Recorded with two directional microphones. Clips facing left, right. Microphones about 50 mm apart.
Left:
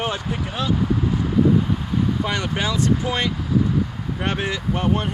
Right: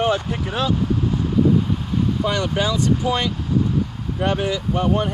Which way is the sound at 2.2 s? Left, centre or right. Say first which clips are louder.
Right 3 dB; left.